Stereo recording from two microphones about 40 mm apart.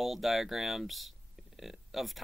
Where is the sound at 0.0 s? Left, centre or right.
Centre.